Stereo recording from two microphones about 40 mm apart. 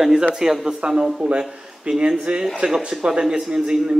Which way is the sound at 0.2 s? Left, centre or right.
Centre.